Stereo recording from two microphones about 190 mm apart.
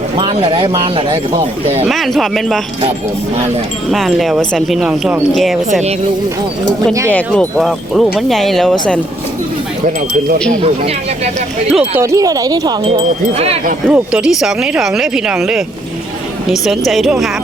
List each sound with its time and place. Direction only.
0.2 s speech: 30° right (ahead or behind)
1.8 s speech: centre (ahead or behind)
3.9 s speech: centre (ahead or behind)
7.1 s speech: 5° left (ahead or behind)
11.7 s speech: 5° right (ahead or behind)
12.0 s speech: 20° right (ahead or behind)
13.3 s wind chime: 30° right (ahead or behind)
13.8 s speech: 5° right (ahead or behind)